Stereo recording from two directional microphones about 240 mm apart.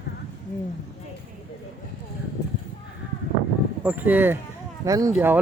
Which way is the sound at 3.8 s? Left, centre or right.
Centre.